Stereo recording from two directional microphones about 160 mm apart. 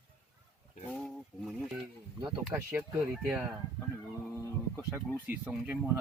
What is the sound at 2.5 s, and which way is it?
Speech, 10° right (ahead or behind).